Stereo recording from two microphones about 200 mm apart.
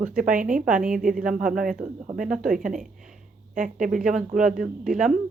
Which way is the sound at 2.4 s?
45° right (ahead or behind).